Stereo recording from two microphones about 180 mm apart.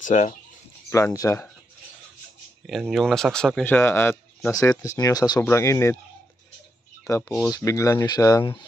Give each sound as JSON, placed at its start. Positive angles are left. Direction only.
{"t": 0.0, "sound": "speech", "side_deg": 40}
{"t": 0.8, "sound": "speech", "side_deg": 15}
{"t": 2.6, "sound": "speech", "side_deg": 0}
{"t": 7.1, "sound": "speech", "side_deg": 15}